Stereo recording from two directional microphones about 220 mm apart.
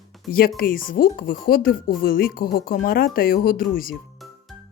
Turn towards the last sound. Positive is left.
turn(degrees=0)  # may be behind; listen again after turning